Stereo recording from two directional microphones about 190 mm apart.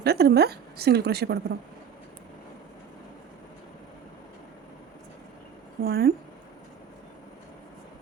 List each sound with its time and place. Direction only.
0.0 s a woman's voice: 55° right (ahead or behind)
5.8 s a woman's voice: 55° right (ahead or behind)